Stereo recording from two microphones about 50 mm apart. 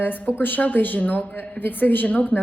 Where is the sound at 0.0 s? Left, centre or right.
Left.